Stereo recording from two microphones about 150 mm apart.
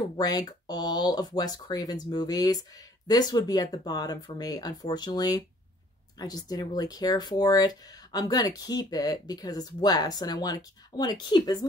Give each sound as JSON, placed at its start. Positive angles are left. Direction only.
{"t": 0.2, "sound": "speech", "side_deg": 25}